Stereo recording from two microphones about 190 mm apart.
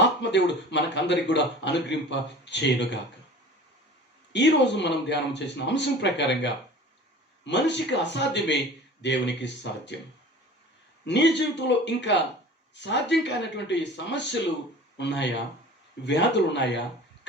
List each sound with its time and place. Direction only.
0.2 s a man's voice: 65° left (ahead or behind)
4.3 s a man's voice: 65° left (ahead or behind)
11.0 s a man's voice: 65° left (ahead or behind)